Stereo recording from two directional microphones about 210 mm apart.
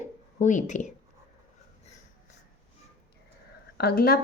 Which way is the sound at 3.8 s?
45° left (ahead or behind).